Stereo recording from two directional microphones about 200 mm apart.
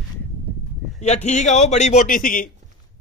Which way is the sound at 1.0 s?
35° left (ahead or behind).